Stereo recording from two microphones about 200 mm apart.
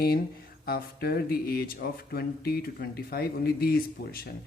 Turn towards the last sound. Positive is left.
turn(degrees=50)  # may be behind; listen again after turning